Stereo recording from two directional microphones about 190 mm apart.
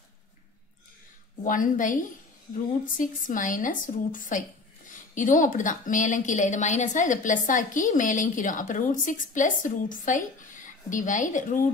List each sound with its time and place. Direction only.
1.4 s a woman's voice: 45° left (ahead or behind)